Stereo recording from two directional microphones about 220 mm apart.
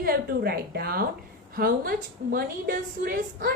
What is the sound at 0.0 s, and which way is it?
A woman's voice, 45° right (ahead or behind).